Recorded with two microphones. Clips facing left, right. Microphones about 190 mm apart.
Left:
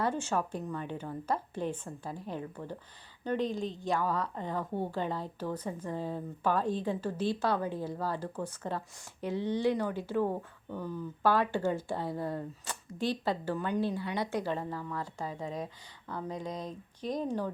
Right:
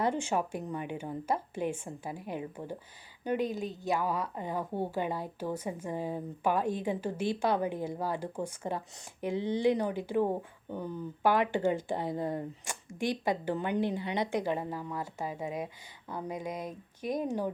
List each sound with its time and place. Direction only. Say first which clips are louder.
0.0 s a woman's voice: right 1 dB; 15° right (ahead or behind)